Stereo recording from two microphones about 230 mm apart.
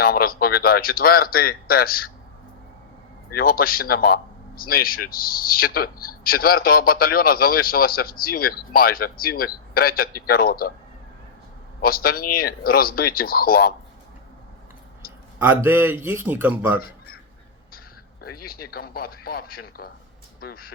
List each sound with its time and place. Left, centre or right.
0.0 s speech: left
3.3 s speech: left
11.8 s speech: left
15.4 s a man's voice: centre
18.2 s speech: left